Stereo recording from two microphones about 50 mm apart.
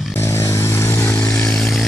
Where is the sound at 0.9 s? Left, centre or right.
Left.